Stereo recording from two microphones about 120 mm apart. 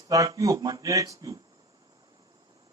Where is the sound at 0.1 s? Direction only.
30° right (ahead or behind).